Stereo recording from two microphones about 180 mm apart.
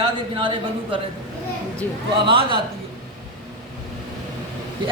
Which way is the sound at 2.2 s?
30° right (ahead or behind).